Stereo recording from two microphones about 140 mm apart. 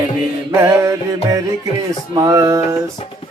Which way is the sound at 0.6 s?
20° right (ahead or behind).